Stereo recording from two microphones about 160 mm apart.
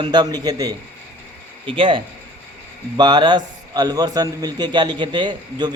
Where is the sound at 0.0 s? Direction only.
25° right (ahead or behind).